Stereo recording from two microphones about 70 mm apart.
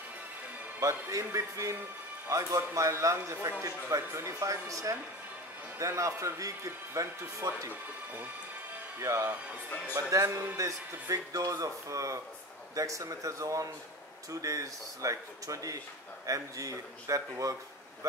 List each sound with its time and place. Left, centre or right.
0.7 s speech: right
9.0 s speech: right
10.0 s speech: right